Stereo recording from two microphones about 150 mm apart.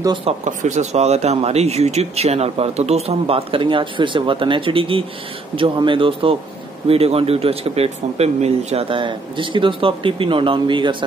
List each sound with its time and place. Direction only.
0.2 s speech: 55° right (ahead or behind); by 11.0 s 35° right (ahead or behind)